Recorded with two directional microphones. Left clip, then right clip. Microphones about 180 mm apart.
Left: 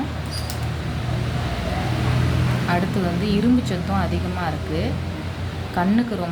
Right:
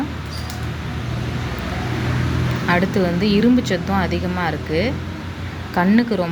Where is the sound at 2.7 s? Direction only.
25° right (ahead or behind).